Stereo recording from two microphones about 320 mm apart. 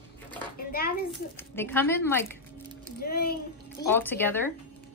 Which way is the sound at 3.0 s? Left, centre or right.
Left.